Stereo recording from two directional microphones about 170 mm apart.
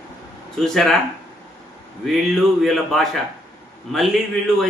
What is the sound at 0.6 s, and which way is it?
Speech, centre (ahead or behind).